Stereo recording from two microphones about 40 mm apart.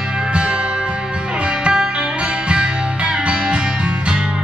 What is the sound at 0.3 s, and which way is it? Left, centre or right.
Music, right.